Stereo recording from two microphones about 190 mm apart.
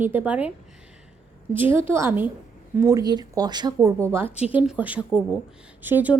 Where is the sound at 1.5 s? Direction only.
10° right (ahead or behind).